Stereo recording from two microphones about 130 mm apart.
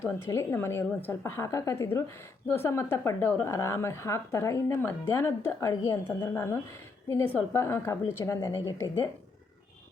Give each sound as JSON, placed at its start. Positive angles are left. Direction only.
{"t": 0.0, "sound": "a woman's voice", "side_deg": 20}